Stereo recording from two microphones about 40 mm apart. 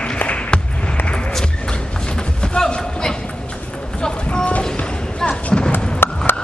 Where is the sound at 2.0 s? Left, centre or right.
Left.